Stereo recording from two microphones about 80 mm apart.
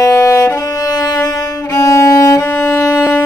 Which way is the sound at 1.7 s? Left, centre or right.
Left.